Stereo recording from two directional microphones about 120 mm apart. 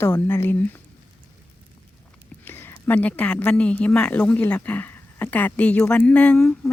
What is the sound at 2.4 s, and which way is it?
Speech, 20° left (ahead or behind).